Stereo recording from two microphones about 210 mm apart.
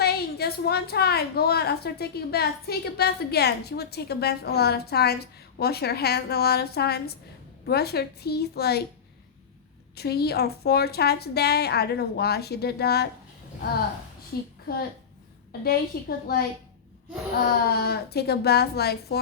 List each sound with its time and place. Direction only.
0.0 s a woman's voice: 50° left (ahead or behind)
9.9 s a woman's voice: 50° left (ahead or behind)
14.7 s a woman's voice: 45° left (ahead or behind)
17.7 s a woman's voice: 50° left (ahead or behind)